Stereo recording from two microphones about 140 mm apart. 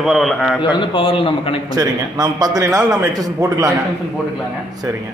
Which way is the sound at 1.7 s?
30° right (ahead or behind).